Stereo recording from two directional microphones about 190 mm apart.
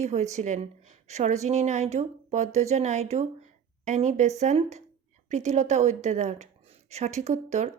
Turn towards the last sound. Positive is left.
turn(degrees=-35)  # may be behind; listen again after turning